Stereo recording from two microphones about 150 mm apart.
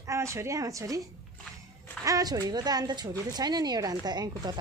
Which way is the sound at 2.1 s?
25° right (ahead or behind).